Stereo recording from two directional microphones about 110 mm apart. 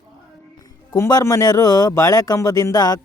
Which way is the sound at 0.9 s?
30° left (ahead or behind).